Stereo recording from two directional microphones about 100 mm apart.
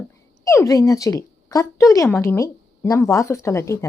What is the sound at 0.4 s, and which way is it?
A woman's voice, 30° left (ahead or behind).